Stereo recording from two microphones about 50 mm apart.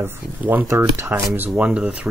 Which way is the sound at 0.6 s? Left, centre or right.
Right.